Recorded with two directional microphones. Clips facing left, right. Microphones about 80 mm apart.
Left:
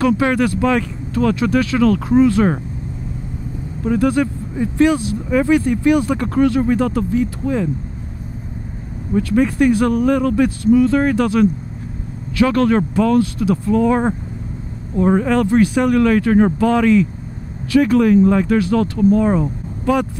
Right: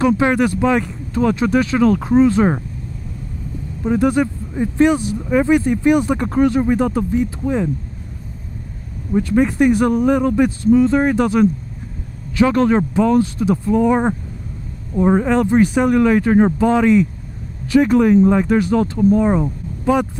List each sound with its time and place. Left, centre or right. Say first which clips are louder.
0.0 s speech: right 1 dB; right
3.8 s speech: even; right
9.1 s speech: even; centre